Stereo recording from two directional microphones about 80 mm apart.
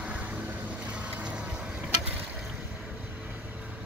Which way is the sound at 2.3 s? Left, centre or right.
Centre.